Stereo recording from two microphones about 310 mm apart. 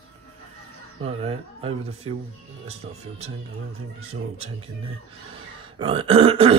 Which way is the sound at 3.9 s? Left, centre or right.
Centre.